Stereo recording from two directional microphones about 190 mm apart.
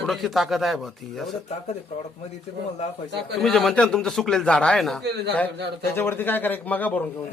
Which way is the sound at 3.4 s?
Centre (ahead or behind).